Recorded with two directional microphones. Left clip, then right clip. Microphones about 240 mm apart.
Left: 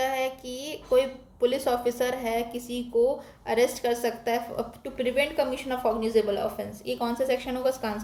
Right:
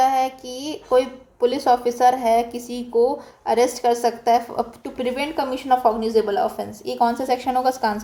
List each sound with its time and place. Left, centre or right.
0.0 s a woman's voice: centre